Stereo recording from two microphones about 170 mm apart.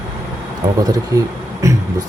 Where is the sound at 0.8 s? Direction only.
20° right (ahead or behind).